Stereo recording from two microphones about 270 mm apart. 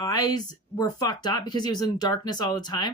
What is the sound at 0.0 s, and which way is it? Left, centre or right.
Speech, centre.